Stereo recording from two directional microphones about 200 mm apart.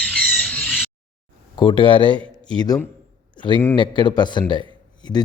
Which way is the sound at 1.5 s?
25° left (ahead or behind).